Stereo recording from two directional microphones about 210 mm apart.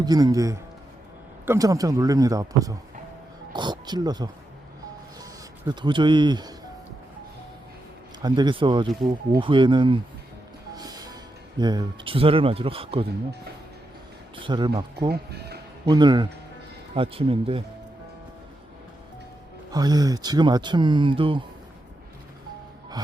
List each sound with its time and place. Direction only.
0.0 s a man's voice: 20° right (ahead or behind)
8.2 s speech: 20° right (ahead or behind)
14.3 s speech: 25° right (ahead or behind)
15.1 s speech: 50° right (ahead or behind)
15.9 s speech: 20° right (ahead or behind)
19.7 s speech: 20° right (ahead or behind)